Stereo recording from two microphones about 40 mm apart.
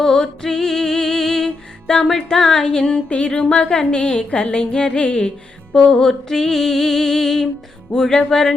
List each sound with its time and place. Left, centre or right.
0.0 s music: centre
3.1 s a sound: left
6.0 s music: centre